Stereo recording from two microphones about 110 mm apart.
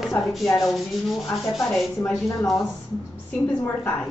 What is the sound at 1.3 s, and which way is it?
Rub, 5° left (ahead or behind).